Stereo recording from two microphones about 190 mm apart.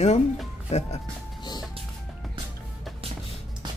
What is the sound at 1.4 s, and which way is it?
Music, 20° left (ahead or behind).